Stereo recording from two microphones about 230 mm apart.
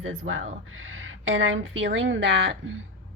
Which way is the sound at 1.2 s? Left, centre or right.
Right.